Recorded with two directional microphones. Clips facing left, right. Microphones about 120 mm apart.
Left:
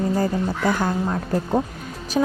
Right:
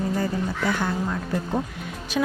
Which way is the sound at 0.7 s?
40° left (ahead or behind).